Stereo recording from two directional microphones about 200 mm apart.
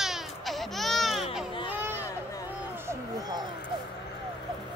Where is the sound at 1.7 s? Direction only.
10° right (ahead or behind).